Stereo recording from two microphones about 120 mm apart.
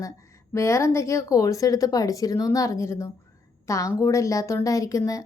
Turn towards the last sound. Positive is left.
turn(degrees=25)  # may be behind; listen again after turning